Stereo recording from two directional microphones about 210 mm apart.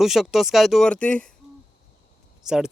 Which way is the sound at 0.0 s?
Centre (ahead or behind).